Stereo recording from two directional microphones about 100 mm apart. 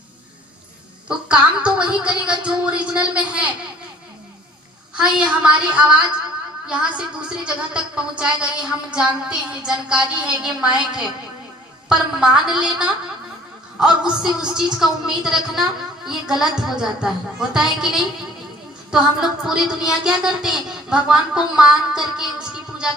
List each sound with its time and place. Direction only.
1.0 s a woman's voice: 10° right (ahead or behind)
4.9 s a woman's voice: 10° right (ahead or behind)